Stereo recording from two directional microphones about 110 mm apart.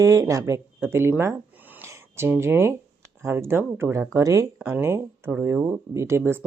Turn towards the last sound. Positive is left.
turn(degrees=-20)  # may be behind; listen again after turning